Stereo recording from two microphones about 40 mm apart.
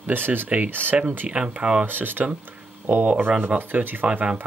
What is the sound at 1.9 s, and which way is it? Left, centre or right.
Speech, right.